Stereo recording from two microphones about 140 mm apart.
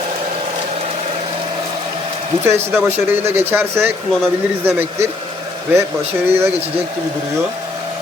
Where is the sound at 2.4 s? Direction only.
15° right (ahead or behind).